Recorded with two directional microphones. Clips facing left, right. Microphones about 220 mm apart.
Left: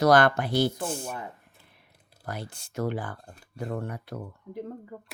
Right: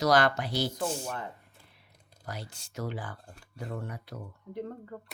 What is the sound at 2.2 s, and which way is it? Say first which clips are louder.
Speech: left 4 dB; 55° left (ahead or behind).